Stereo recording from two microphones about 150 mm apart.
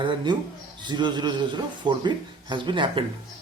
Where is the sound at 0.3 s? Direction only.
30° right (ahead or behind).